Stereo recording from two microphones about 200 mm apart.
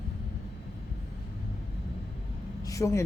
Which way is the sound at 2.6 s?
15° left (ahead or behind).